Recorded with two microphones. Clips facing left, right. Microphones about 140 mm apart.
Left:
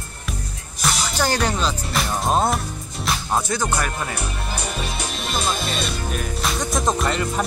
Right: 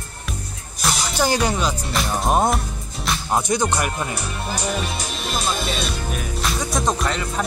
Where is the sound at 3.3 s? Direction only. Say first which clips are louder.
Right 3 dB; 15° right (ahead or behind).